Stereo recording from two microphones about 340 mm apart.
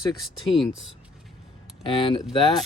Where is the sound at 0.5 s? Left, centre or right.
Centre.